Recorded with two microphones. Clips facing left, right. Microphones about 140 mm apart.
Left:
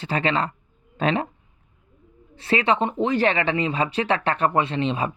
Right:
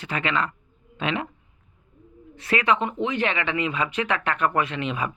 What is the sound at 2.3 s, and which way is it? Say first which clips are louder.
Speech: left 1 dB; 30° left (ahead or behind).